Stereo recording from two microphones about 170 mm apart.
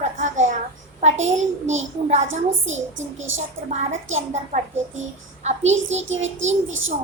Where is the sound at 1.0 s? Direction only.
40° right (ahead or behind).